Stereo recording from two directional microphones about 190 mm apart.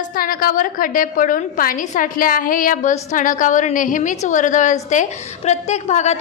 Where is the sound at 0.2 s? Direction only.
50° left (ahead or behind).